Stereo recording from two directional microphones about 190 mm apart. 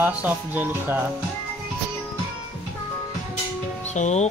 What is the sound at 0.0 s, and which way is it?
Speech, 10° right (ahead or behind).